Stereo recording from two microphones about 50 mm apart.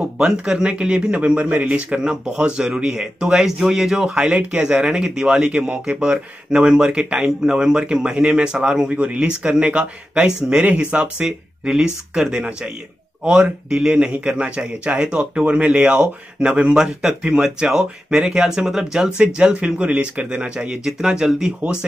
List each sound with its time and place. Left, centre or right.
0.0 s speech: centre
8.9 s speech: right
10.6 s speech: right
11.2 s speech: centre